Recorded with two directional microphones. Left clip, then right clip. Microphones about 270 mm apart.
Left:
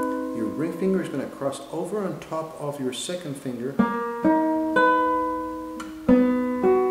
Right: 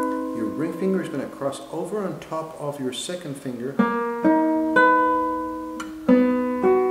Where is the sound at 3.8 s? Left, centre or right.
Centre.